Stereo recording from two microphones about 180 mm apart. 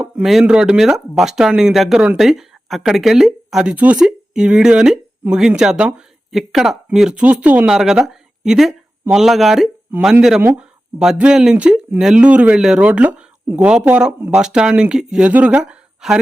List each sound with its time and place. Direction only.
0.0 s speech: 5° right (ahead or behind)